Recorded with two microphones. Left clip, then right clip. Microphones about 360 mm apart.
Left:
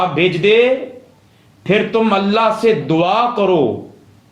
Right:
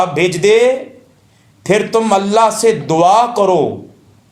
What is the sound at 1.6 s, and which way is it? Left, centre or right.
Speech, centre.